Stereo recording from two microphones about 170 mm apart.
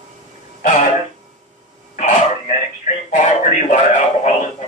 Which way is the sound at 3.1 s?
45° left (ahead or behind).